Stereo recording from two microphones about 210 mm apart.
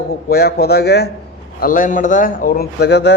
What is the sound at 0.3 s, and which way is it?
A man's voice, 50° left (ahead or behind).